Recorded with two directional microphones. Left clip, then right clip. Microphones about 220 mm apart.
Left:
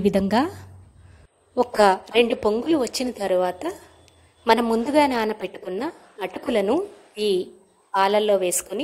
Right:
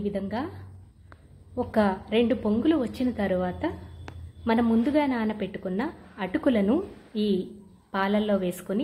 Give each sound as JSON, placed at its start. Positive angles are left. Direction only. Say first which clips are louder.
{"t": 0.0, "sound": "a woman's voice", "louder": "left 10 dB", "side_deg": 45}
{"t": 1.5, "sound": "a woman's voice", "louder": "left 8 dB", "side_deg": 45}